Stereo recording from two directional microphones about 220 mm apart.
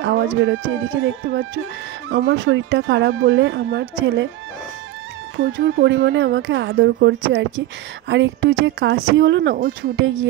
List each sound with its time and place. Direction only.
0.0 s speech: 50° right (ahead or behind)
5.4 s speech: 60° right (ahead or behind)